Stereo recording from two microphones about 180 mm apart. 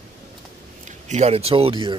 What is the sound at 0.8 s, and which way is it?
A man's voice, 40° right (ahead or behind).